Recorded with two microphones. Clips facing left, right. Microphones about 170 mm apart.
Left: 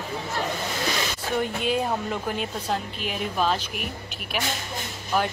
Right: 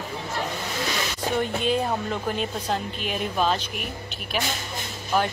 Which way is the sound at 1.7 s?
5° left (ahead or behind).